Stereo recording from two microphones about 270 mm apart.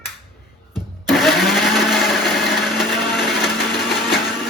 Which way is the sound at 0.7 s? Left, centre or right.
Centre.